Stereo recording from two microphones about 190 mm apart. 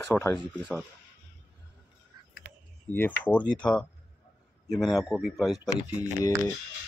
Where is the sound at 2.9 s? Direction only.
10° left (ahead or behind).